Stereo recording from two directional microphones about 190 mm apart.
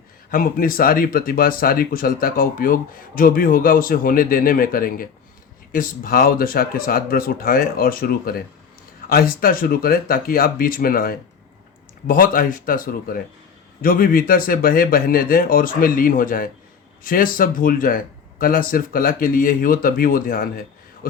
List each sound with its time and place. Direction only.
0.3 s speech: 45° left (ahead or behind)